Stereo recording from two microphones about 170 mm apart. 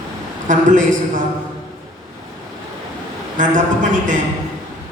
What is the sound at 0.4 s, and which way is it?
Speech, 50° right (ahead or behind).